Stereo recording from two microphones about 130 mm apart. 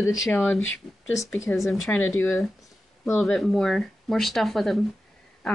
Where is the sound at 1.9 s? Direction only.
15° left (ahead or behind).